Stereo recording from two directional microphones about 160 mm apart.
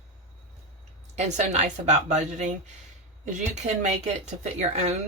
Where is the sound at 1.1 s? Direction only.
45° right (ahead or behind).